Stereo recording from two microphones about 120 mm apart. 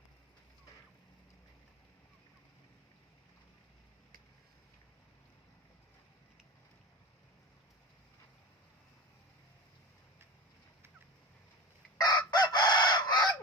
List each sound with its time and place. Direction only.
11.9 s chicken: 35° left (ahead or behind)